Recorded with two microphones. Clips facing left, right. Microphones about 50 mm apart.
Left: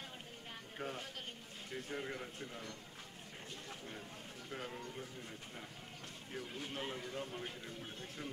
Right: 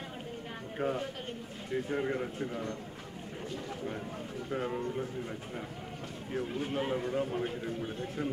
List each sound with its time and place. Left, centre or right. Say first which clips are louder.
0.7 s speech: right 11 dB; right
4.5 s a man's voice: right 12 dB; right
6.3 s a man's voice: right 11 dB; right
7.0 s a man's voice: right 12 dB; right